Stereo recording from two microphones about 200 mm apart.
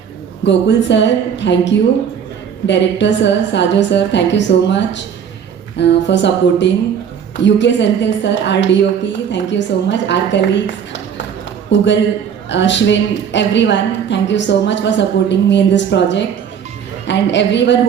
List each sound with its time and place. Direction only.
0.4 s a woman's voice: 65° left (ahead or behind)